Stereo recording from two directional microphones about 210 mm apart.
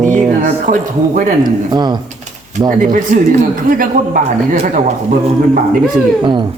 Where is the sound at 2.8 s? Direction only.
40° right (ahead or behind).